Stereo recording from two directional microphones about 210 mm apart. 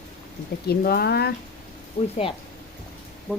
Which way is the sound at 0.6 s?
50° left (ahead or behind).